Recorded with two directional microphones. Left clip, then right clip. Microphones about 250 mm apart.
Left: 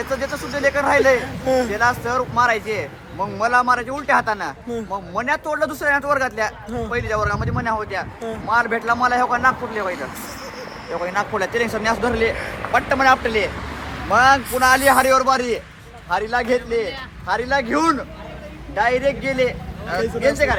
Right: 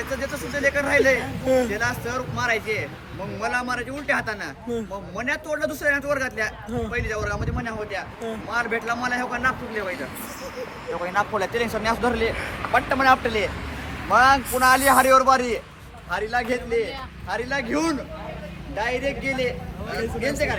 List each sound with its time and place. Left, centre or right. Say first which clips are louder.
0.5 s speech: left 3 dB; centre
1.5 s speech: left 2 dB; centre
1.7 s a man's voice: left 7 dB; centre
11.0 s a man's voice: left 2 dB; centre
16.0 s speech: left 5 dB; left